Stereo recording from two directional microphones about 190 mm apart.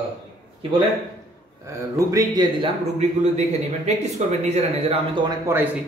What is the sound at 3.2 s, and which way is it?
Speech, 35° right (ahead or behind).